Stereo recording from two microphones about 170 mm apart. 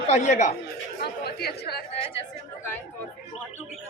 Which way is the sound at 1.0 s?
70° left (ahead or behind).